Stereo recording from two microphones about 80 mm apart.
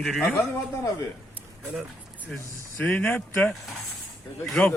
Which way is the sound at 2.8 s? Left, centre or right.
Left.